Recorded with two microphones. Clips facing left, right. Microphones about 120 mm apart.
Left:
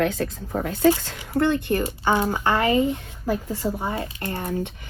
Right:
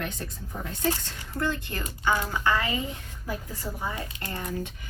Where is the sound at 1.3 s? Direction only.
55° left (ahead or behind).